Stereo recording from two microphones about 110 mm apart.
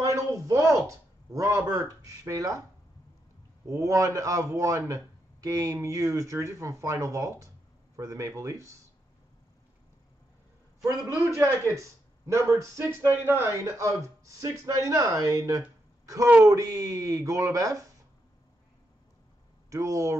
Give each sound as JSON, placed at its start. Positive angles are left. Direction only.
{"t": 0.0, "sound": "a sound", "side_deg": -30}
{"t": 3.6, "sound": "a man's voice", "side_deg": -30}
{"t": 11.2, "sound": "a man's voice", "side_deg": -25}
{"t": 19.7, "sound": "a man's voice", "side_deg": -30}